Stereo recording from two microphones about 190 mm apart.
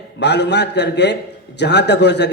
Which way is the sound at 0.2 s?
65° left (ahead or behind).